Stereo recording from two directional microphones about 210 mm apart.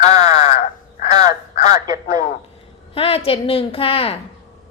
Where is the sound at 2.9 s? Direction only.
30° left (ahead or behind).